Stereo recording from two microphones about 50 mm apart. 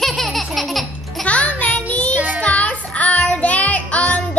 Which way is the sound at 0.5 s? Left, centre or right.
Centre.